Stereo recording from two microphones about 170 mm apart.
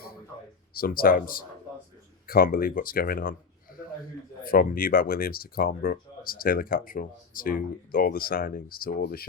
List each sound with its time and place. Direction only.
0.7 s speech: 60° left (ahead or behind)
4.4 s speech: 60° left (ahead or behind)